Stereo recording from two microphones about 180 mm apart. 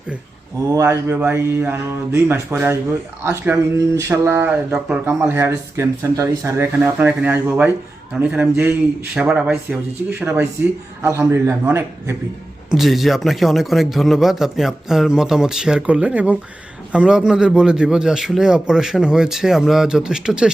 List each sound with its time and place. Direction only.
0.7 s speech: 15° right (ahead or behind)
12.7 s speech: centre (ahead or behind)